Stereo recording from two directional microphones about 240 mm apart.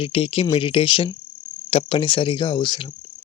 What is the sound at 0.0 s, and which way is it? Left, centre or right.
Cricket, left.